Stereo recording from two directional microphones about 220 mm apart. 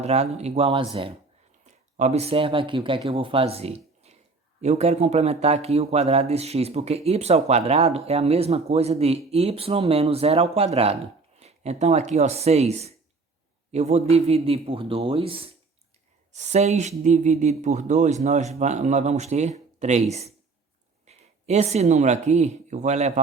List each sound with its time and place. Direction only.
0.0 s a man's voice: 30° right (ahead or behind)